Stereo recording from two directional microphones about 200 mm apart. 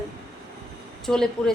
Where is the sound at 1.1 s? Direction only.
5° left (ahead or behind).